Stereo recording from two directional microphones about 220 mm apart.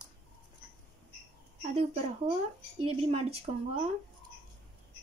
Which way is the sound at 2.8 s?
25° right (ahead or behind).